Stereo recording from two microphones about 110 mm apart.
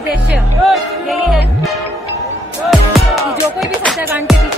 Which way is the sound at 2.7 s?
Centre (ahead or behind).